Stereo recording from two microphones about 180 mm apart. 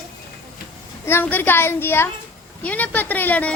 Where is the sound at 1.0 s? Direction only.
10° left (ahead or behind).